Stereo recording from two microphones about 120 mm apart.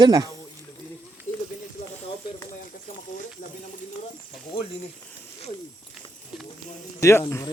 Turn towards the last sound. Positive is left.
turn(degrees=20)  # may be behind; listen again after turning